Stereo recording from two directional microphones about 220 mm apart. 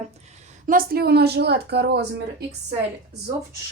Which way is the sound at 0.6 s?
40° right (ahead or behind).